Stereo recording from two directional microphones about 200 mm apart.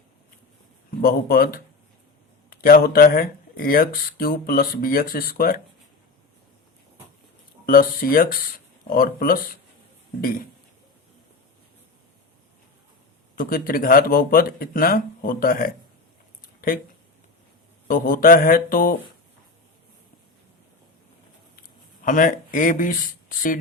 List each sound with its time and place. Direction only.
0.9 s speech: 45° left (ahead or behind)
2.6 s speech: 45° left (ahead or behind)
7.7 s speech: 45° left (ahead or behind)
13.3 s speech: 45° left (ahead or behind)
17.8 s speech: 45° left (ahead or behind)
22.0 s speech: 40° left (ahead or behind)